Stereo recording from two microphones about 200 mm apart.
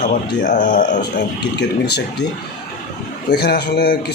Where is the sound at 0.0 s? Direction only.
40° left (ahead or behind).